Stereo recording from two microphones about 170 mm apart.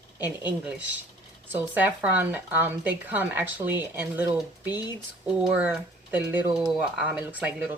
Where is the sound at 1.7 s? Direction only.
10° right (ahead or behind).